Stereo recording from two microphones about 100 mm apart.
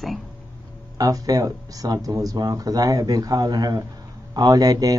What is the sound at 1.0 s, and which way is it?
Speech, 40° right (ahead or behind).